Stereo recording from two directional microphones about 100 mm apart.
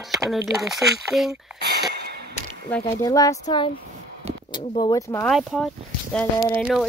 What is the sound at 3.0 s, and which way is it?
Speech, 35° left (ahead or behind).